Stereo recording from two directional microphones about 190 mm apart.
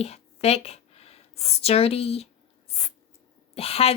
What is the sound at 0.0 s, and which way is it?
Speech, 30° left (ahead or behind).